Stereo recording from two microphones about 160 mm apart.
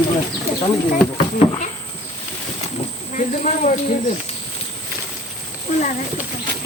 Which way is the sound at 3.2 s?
50° left (ahead or behind).